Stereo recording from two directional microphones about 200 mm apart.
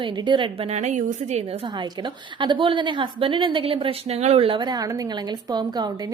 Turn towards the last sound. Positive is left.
turn(degrees=-20)  # may be behind; listen again after turning